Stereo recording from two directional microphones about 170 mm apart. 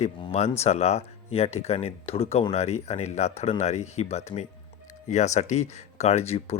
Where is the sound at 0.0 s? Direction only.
40° left (ahead or behind).